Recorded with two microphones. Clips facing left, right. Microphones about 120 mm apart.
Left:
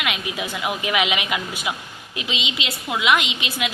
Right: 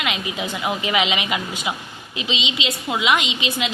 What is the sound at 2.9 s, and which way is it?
Speech, centre (ahead or behind).